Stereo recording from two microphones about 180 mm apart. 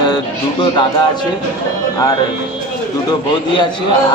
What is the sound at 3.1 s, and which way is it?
Speech, 25° left (ahead or behind).